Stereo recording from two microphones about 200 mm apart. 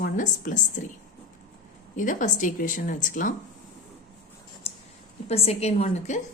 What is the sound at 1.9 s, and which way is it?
A woman's voice, 40° left (ahead or behind).